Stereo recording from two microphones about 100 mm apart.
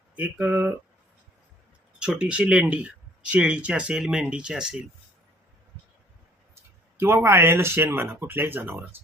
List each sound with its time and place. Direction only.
0.2 s speech: 20° right (ahead or behind)
2.0 s speech: 10° right (ahead or behind)
6.6 s speech: 20° right (ahead or behind)